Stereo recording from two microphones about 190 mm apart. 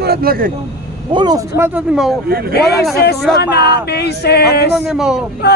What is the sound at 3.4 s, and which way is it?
Speech, 60° left (ahead or behind).